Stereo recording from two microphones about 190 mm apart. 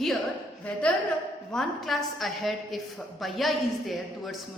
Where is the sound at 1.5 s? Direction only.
Centre (ahead or behind).